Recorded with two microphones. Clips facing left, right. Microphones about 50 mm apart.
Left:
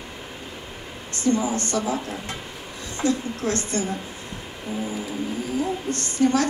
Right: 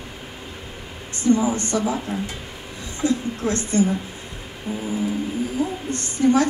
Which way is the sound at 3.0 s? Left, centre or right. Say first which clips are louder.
Right 2 dB; right.